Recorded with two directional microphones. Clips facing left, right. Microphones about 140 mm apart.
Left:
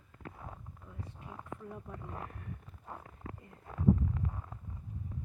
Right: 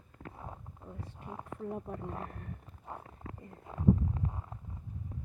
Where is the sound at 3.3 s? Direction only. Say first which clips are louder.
Right 5 dB; 30° right (ahead or behind).